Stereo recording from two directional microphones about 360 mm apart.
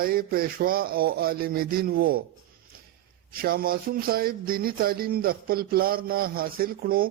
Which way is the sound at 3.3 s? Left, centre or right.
Right.